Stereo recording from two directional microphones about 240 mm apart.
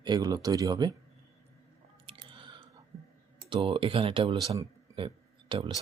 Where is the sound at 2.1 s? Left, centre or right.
Right.